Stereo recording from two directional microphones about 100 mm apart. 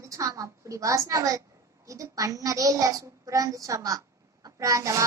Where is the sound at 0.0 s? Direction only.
35° right (ahead or behind).